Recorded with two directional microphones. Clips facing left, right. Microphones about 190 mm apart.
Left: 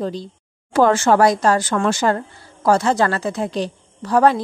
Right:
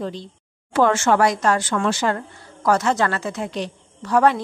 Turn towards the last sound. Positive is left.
turn(degrees=35)  # may be behind; listen again after turning